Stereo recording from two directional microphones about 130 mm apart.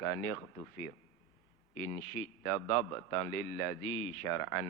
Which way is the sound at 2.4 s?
25° left (ahead or behind).